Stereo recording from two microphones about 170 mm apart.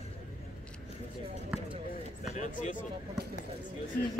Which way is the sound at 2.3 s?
45° left (ahead or behind).